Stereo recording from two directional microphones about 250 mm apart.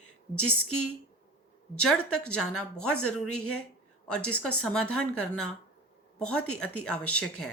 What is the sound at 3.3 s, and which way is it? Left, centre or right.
Speech, left.